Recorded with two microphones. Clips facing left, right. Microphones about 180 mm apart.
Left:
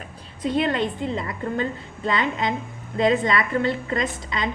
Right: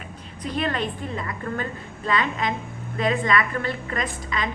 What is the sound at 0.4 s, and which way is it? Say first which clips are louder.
A woman's voice: left 4 dB; 25° left (ahead or behind).